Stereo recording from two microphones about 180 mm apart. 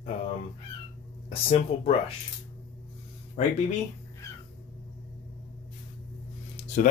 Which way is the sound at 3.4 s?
40° left (ahead or behind).